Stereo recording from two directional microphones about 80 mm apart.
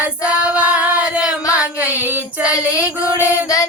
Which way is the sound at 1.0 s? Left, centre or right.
Centre.